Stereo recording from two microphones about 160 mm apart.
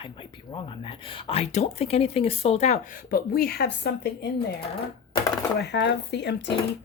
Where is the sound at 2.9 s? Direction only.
65° left (ahead or behind).